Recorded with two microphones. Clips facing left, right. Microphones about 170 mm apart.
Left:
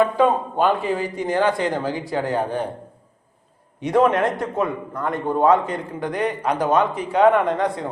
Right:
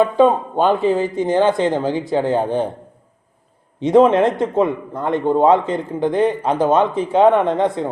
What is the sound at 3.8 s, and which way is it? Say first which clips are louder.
A man's voice: right 6 dB; 25° right (ahead or behind).